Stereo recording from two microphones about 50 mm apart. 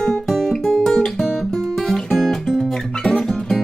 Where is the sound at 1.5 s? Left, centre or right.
Centre.